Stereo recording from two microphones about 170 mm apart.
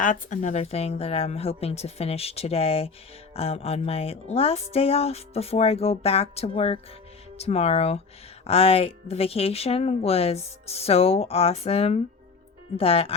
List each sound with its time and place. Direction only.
0.0 s speech: 50° left (ahead or behind)